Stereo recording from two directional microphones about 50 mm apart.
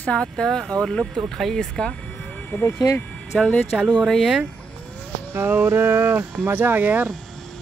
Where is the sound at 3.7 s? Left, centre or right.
Centre.